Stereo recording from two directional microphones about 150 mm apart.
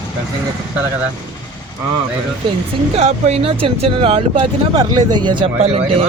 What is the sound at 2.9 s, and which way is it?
Speech, 45° right (ahead or behind).